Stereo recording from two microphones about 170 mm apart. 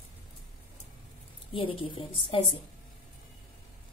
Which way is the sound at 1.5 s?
30° left (ahead or behind).